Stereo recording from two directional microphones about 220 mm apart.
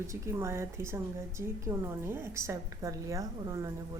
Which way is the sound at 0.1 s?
10° right (ahead or behind).